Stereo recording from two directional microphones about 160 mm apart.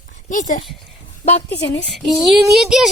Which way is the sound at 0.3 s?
55° left (ahead or behind).